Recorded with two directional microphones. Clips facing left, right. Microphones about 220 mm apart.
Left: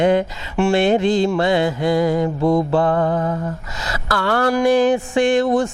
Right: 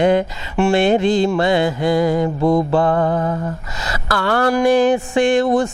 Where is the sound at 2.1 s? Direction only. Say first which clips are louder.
Right 1 dB; 30° right (ahead or behind).